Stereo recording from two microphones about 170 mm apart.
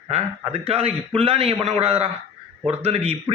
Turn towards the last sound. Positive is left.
turn(degrees=-35)  # may be behind; listen again after turning